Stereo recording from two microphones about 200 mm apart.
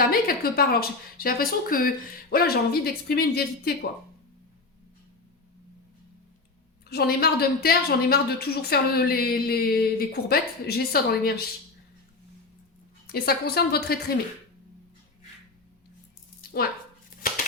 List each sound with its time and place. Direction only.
0.0 s a woman's voice: 45° left (ahead or behind)
6.8 s a woman's voice: 50° left (ahead or behind)
13.1 s a woman's voice: 50° left (ahead or behind)
16.4 s a sound: 45° left (ahead or behind)